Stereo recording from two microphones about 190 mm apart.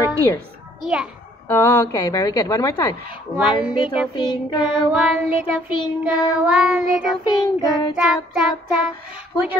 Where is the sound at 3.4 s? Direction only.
25° left (ahead or behind).